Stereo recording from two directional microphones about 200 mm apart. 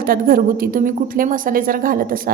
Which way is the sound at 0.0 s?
45° right (ahead or behind).